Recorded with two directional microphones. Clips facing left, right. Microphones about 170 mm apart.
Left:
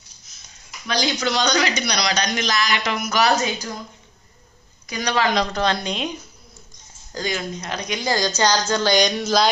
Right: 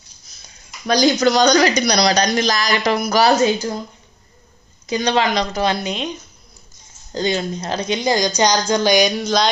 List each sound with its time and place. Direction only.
0.9 s speech: 40° right (ahead or behind)
4.9 s speech: 25° right (ahead or behind)
5.3 s a woman's voice: centre (ahead or behind)
6.0 s speech: 10° left (ahead or behind)
7.1 s a woman's voice: 25° right (ahead or behind); by 9.5 s 5° left (ahead or behind)